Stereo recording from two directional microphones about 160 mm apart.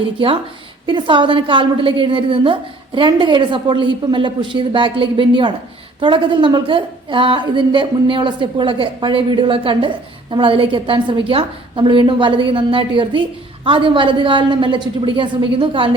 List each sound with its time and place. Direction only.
0.2 s a woman's voice: 35° right (ahead or behind)